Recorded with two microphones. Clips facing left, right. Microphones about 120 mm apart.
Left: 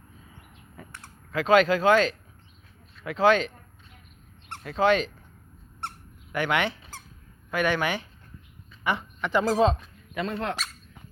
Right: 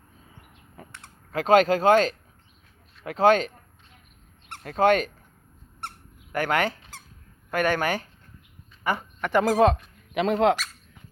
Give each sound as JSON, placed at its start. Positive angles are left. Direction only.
{"t": 1.3, "sound": "speech", "side_deg": -45}
{"t": 4.6, "sound": "speech", "side_deg": -50}
{"t": 6.3, "sound": "speech", "side_deg": -45}
{"t": 10.2, "sound": "speech", "side_deg": -90}